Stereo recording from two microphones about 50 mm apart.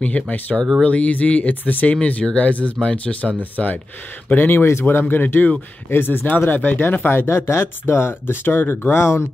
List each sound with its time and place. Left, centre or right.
0.0 s speech: left
7.1 s speech: left